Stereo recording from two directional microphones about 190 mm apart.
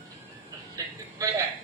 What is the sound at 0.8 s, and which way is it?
Speech, 15° right (ahead or behind).